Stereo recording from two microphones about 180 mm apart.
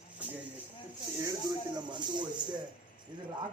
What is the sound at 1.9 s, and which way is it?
Speech, 25° right (ahead or behind).